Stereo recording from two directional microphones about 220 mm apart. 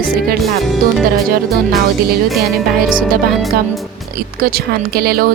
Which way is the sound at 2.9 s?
40° right (ahead or behind).